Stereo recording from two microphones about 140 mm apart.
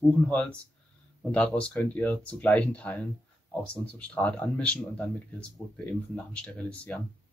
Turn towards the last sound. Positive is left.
turn(degrees=10)  # may be behind; listen again after turning